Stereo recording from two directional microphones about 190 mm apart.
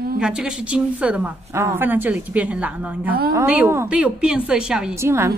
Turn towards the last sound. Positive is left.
turn(degrees=-15)  # may be behind; listen again after turning